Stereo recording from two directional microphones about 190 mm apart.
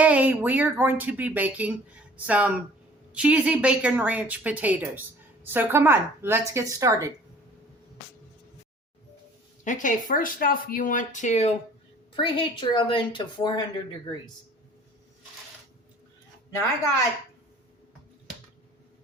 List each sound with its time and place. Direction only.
0.0 s a woman's voice: 10° right (ahead or behind)
9.6 s a woman's voice: 40° left (ahead or behind); by 13.7 s 25° left (ahead or behind)